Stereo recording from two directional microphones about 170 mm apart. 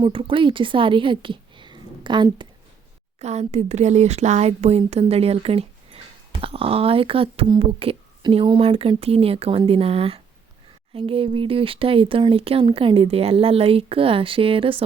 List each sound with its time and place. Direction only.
0.0 s a woman's voice: 30° right (ahead or behind)
3.2 s speech: 40° right (ahead or behind)